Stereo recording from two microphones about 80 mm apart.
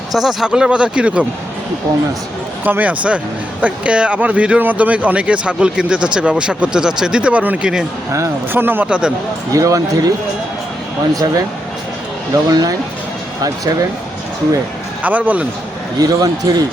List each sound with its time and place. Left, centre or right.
0.1 s speech: centre
2.6 s speech: right
8.5 s speech: right
8.9 s speech: centre
9.5 s speech: right
11.1 s speech: right
15.0 s speech: centre
16.0 s speech: right